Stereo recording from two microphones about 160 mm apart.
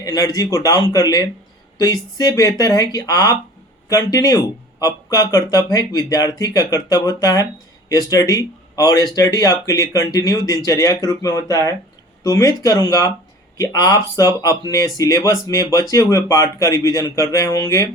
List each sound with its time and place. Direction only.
0.0 s speech: 25° left (ahead or behind)